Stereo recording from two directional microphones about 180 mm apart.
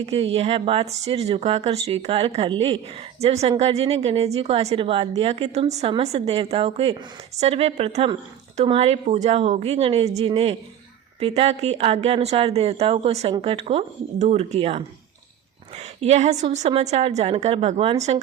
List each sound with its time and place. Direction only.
0.0 s speech: 35° right (ahead or behind)
16.0 s speech: 35° right (ahead or behind)